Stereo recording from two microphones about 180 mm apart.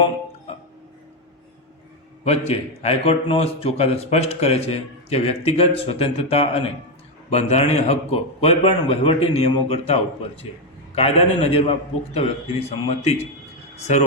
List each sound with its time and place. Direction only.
2.2 s a man's voice: 35° left (ahead or behind)